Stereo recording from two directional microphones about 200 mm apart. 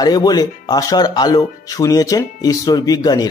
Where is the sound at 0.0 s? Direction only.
20° left (ahead or behind).